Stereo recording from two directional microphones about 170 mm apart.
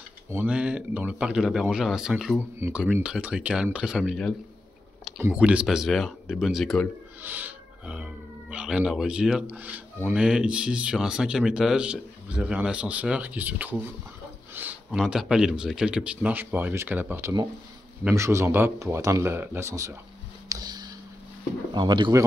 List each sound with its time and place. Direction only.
0.3 s speech: 10° right (ahead or behind)
7.2 s speech: 10° right (ahead or behind)
20.4 s a sound: 25° right (ahead or behind)
21.7 s speech: 25° right (ahead or behind)